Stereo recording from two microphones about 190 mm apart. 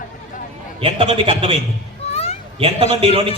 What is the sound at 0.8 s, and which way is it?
Speech, 30° right (ahead or behind).